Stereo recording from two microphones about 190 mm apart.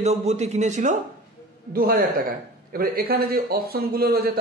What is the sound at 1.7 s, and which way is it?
Speech, 50° right (ahead or behind).